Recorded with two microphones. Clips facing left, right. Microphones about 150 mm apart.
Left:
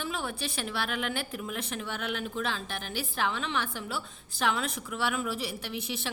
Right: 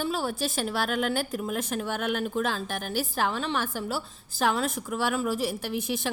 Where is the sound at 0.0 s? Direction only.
35° right (ahead or behind).